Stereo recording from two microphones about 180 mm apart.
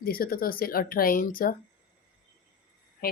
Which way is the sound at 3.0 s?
50° left (ahead or behind).